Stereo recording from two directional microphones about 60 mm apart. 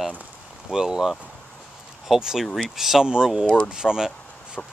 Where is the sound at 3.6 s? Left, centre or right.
Centre.